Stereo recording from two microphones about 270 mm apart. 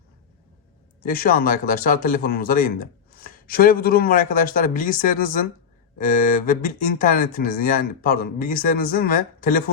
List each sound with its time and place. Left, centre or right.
1.0 s speech: left